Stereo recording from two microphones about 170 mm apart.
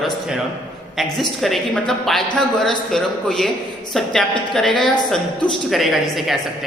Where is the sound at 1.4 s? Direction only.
Centre (ahead or behind).